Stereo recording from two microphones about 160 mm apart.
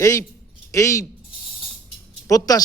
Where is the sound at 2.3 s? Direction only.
20° left (ahead or behind).